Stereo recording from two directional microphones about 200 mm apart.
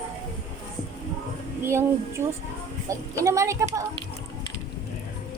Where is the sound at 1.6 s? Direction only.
10° right (ahead or behind).